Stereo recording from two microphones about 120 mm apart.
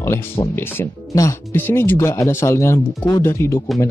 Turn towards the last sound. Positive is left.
turn(degrees=20)  # may be behind; listen again after turning